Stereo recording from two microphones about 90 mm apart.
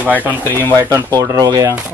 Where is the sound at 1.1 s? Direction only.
40° right (ahead or behind).